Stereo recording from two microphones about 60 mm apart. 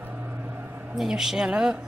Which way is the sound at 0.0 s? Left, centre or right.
Right.